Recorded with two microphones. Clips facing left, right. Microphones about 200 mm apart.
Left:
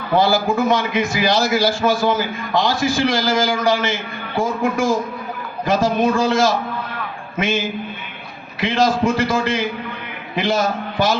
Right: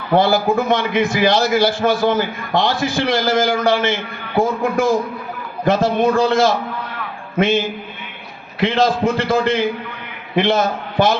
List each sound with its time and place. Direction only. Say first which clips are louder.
0.2 s a man's voice: even; 60° right (ahead or behind)
8.6 s a man's voice: right 1 dB; 60° right (ahead or behind)
10.3 s a man's voice: right 3 dB; 55° right (ahead or behind)